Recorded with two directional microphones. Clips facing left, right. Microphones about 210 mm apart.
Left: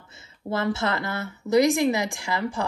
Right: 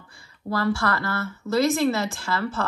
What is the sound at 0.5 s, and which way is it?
A woman's voice, 20° left (ahead or behind).